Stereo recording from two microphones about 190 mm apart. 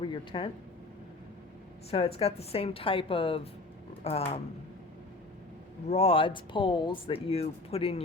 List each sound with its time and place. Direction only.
0.0 s speech: 25° left (ahead or behind)
1.9 s speech: 30° left (ahead or behind)
5.9 s speech: 30° left (ahead or behind)